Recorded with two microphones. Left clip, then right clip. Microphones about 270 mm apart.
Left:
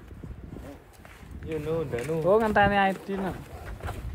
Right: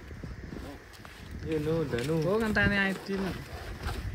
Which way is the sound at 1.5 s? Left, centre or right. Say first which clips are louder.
Left 1 dB; right.